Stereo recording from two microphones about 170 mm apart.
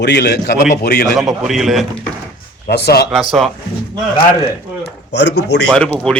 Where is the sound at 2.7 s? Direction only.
75° left (ahead or behind).